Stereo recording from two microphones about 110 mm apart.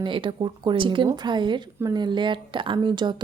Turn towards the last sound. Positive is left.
turn(degrees=-45)  # may be behind; listen again after turning